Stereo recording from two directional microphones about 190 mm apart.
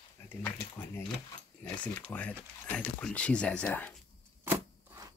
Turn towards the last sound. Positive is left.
turn(degrees=-15)  # may be behind; listen again after turning